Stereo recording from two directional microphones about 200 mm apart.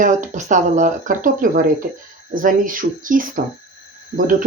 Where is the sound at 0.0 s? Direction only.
40° right (ahead or behind).